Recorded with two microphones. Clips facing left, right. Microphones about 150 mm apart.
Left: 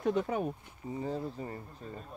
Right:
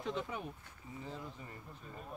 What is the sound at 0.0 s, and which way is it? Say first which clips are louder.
Speech: left 9 dB; 45° left (ahead or behind).